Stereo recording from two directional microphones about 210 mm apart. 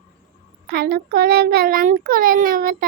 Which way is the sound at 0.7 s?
45° right (ahead or behind).